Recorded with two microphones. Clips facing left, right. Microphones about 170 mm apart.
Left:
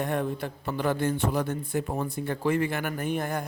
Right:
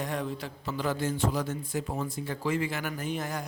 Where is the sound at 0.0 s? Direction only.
55° left (ahead or behind).